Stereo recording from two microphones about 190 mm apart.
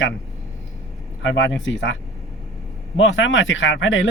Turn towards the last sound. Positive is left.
turn(degrees=85)